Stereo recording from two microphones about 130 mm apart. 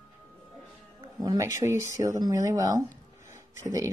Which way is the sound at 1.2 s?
25° right (ahead or behind).